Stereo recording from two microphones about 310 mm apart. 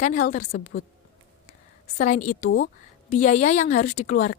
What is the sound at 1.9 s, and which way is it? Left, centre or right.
A woman's voice, left.